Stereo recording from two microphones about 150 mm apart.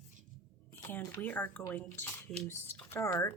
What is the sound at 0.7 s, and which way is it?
Speech, 15° left (ahead or behind).